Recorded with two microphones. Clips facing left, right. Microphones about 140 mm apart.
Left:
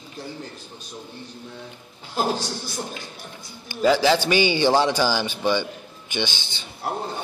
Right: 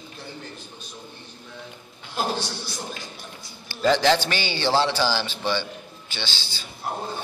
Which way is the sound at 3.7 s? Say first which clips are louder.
Left 1 dB; 10° left (ahead or behind).